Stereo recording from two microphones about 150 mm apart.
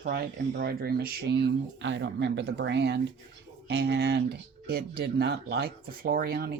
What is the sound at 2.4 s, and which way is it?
Speech, 90° right.